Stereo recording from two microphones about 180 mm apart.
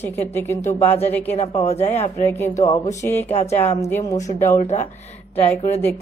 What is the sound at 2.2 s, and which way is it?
A woman's voice, 15° left (ahead or behind).